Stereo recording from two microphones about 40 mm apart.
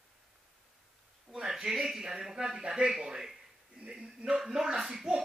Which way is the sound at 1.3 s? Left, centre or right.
Centre.